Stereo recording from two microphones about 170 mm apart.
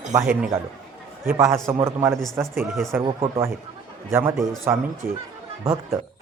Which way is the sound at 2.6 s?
Centre (ahead or behind).